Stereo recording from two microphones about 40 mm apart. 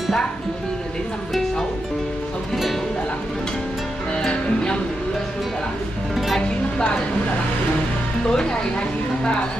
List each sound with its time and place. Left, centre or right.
2.5 s music: centre
8.3 s a woman's voice: centre